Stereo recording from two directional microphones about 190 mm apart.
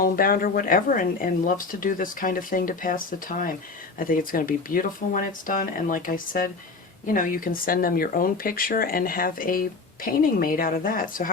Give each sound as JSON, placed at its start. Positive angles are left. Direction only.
{"t": 0.0, "sound": "speech", "side_deg": 50}